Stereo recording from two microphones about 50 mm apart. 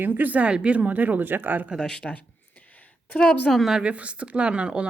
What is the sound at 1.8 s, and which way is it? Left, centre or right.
Speech, centre.